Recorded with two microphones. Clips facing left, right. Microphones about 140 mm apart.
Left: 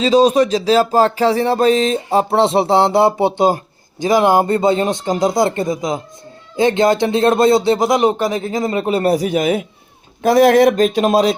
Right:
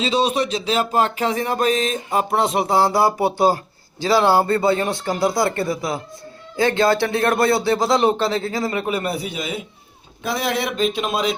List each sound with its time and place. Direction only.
0.0 s music: 40° left (ahead or behind); by 3.6 s 20° left (ahead or behind)
4.0 s speech: 15° left (ahead or behind); by 11.3 s 40° left (ahead or behind)